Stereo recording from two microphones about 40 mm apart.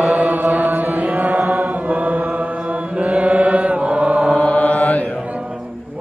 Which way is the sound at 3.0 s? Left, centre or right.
Right.